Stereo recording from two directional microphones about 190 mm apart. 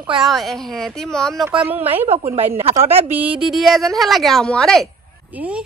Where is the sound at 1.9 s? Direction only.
30° right (ahead or behind).